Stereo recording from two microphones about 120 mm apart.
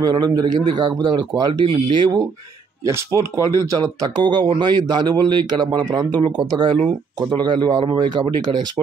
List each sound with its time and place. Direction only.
0.0 s speech: 35° right (ahead or behind)
2.8 s speech: 25° right (ahead or behind); by 8.8 s 40° right (ahead or behind)